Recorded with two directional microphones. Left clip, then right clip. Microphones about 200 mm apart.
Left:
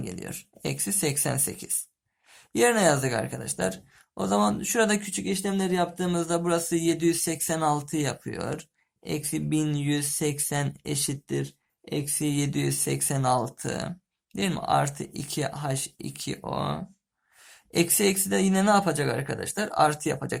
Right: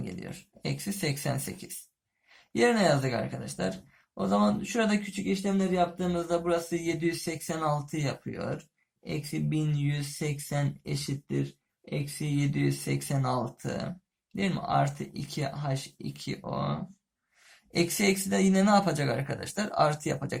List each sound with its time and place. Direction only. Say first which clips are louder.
0.0 s speech: left 4 dB; 40° left (ahead or behind)